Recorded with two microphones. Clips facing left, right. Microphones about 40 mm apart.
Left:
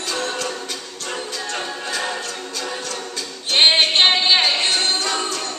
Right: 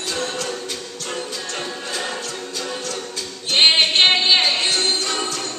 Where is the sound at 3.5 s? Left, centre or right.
Centre.